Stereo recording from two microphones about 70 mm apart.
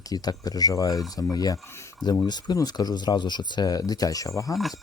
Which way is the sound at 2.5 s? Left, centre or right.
Left.